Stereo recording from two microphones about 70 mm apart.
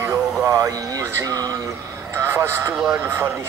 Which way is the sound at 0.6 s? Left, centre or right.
Right.